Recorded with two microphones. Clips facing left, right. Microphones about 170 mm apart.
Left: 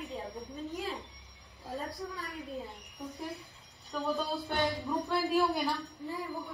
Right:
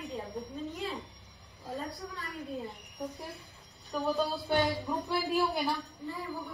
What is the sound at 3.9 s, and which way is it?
Speech, 5° right (ahead or behind).